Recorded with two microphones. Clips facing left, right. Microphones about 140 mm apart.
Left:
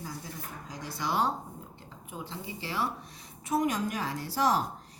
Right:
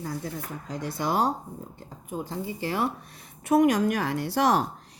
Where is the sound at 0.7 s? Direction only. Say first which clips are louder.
Right 5 dB; 55° right (ahead or behind).